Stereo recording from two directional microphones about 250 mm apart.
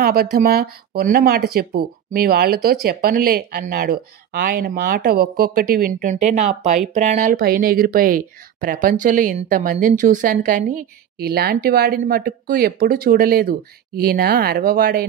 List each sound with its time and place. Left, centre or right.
0.0 s speech: right